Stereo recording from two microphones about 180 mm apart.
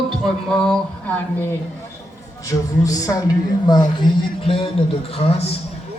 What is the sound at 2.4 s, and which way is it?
A woman's voice, 20° left (ahead or behind).